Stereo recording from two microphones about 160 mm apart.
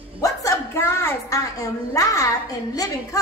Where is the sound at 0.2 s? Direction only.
20° left (ahead or behind).